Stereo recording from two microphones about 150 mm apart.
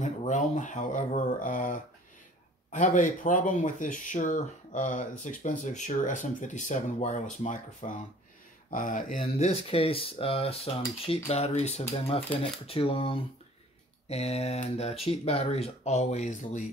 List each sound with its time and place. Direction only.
0.0 s speech: 55° left (ahead or behind)
9.2 s cutlery: 40° left (ahead or behind)
14.0 s speech: 45° left (ahead or behind)